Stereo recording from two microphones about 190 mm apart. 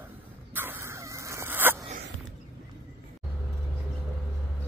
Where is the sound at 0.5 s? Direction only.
10° right (ahead or behind).